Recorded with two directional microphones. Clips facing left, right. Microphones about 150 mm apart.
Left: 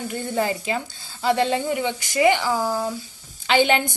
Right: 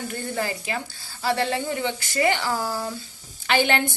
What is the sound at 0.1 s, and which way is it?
A woman's voice, 20° left (ahead or behind).